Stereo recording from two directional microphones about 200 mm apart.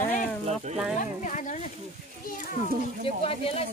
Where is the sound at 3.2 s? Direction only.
30° left (ahead or behind).